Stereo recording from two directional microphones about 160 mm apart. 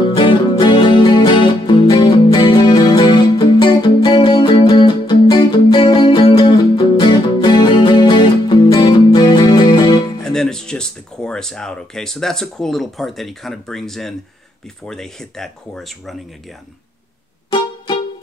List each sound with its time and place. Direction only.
0.1 s music: 30° left (ahead or behind)
10.2 s speech: 5° left (ahead or behind)